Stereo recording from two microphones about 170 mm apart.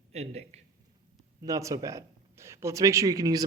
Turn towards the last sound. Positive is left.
turn(degrees=-20)  # may be behind; listen again after turning